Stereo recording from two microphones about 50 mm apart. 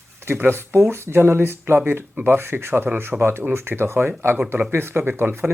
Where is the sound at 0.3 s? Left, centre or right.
Right.